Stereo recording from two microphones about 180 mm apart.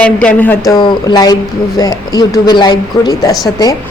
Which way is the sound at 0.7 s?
20° left (ahead or behind).